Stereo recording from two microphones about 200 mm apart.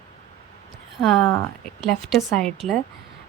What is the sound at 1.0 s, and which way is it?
A woman's voice, centre (ahead or behind).